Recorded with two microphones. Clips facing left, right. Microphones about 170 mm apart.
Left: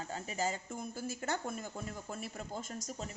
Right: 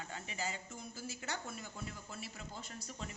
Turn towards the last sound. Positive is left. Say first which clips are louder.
# left 5 dB
turn(degrees=40)  # may be behind; listen again after turning